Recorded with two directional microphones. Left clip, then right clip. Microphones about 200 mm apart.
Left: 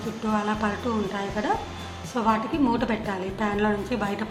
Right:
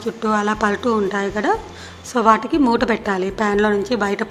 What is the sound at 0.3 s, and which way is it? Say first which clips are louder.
A woman's voice: right 8 dB; 50° right (ahead or behind).